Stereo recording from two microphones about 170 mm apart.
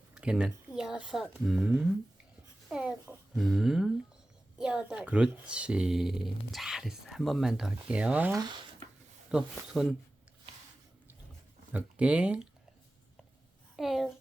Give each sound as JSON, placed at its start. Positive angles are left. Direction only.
{"t": 0.1, "sound": "speech", "side_deg": -5}
{"t": 2.6, "sound": "a sound", "side_deg": -5}
{"t": 3.3, "sound": "speech", "side_deg": 0}
{"t": 8.4, "sound": "speech", "side_deg": -25}
{"t": 9.3, "sound": "speech", "side_deg": -5}
{"t": 11.7, "sound": "speech", "side_deg": -5}
{"t": 13.7, "sound": "speech", "side_deg": 0}